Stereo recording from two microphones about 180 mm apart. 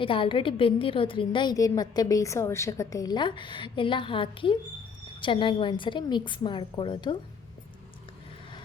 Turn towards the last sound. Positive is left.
turn(degrees=25)  # may be behind; listen again after turning